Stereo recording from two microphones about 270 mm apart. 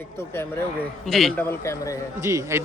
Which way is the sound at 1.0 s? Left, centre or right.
Centre.